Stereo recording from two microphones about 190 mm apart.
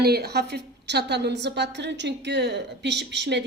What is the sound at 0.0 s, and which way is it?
Speech, 55° right (ahead or behind).